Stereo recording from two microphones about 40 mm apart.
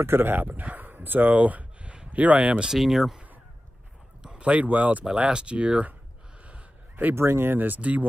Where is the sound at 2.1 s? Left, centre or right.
Right.